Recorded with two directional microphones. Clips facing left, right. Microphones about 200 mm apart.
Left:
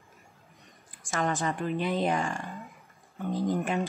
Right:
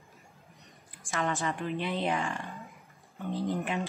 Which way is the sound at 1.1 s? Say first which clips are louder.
Left 2 dB; 40° left (ahead or behind).